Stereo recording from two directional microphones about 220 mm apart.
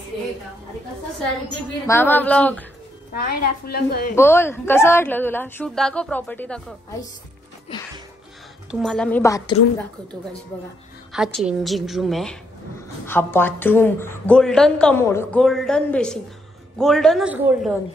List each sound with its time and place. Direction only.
1.9 s a woman's voice: 10° left (ahead or behind)
3.3 s a woman's voice: 45° left (ahead or behind)
4.1 s a woman's voice: 10° left (ahead or behind)
8.8 s a woman's voice: 5° left (ahead or behind)
11.1 s a woman's voice: centre (ahead or behind)